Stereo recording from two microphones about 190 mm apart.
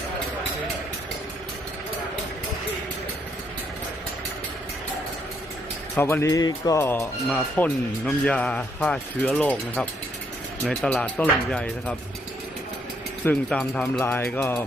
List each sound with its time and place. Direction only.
6.0 s speech: 15° left (ahead or behind)
13.2 s speech: 5° left (ahead or behind)